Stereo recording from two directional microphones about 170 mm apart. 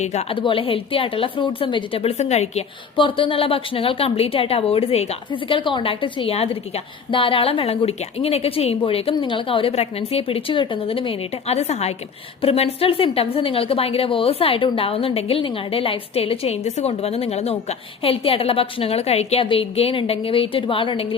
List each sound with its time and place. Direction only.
0.0 s a woman's voice: 40° left (ahead or behind)